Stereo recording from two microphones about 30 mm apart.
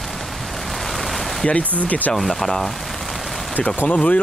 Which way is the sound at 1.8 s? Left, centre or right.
Left.